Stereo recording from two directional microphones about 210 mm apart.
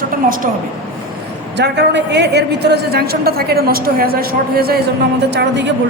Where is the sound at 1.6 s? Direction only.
55° right (ahead or behind).